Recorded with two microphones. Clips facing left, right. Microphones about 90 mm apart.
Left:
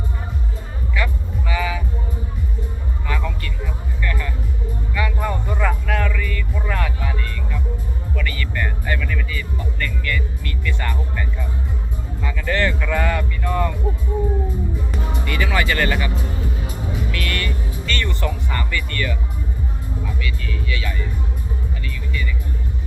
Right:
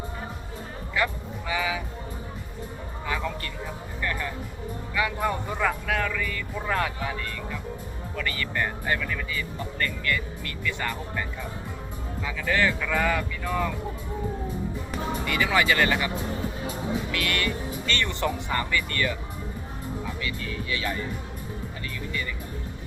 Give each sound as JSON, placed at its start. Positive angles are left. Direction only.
{"t": 0.9, "sound": "cattle", "side_deg": -20}
{"t": 3.1, "sound": "music", "side_deg": -15}
{"t": 4.0, "sound": "music", "side_deg": -25}
{"t": 4.9, "sound": "music", "side_deg": -10}
{"t": 9.7, "sound": "music", "side_deg": -35}
{"t": 10.6, "sound": "music", "side_deg": -10}
{"t": 12.2, "sound": "music", "side_deg": -5}
{"t": 15.3, "sound": "music", "side_deg": -15}
{"t": 20.2, "sound": "music", "side_deg": -30}